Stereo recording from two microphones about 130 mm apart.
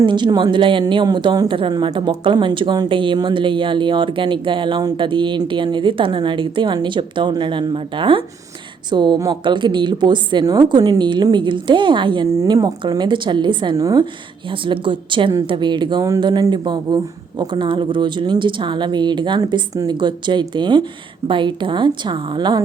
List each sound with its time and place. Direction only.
0.0 s speech: 35° right (ahead or behind)
12.4 s speech: 30° right (ahead or behind)
14.6 s speech: 40° right (ahead or behind)